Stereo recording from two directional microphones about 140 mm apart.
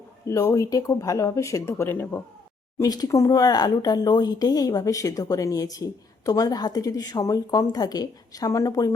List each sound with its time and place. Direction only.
0.3 s speech: 25° left (ahead or behind)
2.7 s speech: 25° left (ahead or behind)